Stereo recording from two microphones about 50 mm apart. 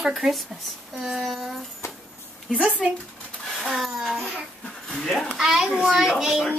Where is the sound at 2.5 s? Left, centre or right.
Centre.